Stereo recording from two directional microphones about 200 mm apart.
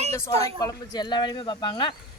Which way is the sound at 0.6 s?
20° left (ahead or behind).